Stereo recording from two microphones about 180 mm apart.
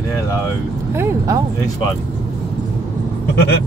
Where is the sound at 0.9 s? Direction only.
15° right (ahead or behind).